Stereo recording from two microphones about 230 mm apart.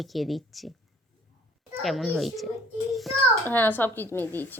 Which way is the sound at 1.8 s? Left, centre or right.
Centre.